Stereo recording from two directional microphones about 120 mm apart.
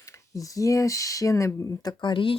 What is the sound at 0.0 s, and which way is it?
Speech, 30° left (ahead or behind).